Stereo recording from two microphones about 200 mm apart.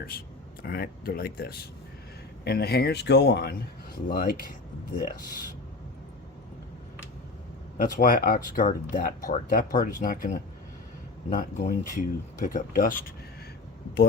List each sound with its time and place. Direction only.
0.6 s speech: 50° left (ahead or behind)
7.8 s speech: 45° left (ahead or behind)